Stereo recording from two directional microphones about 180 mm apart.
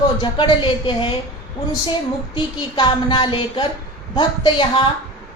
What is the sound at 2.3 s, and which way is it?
Speech, 30° left (ahead or behind).